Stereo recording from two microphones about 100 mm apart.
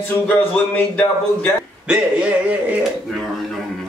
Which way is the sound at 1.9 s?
10° right (ahead or behind).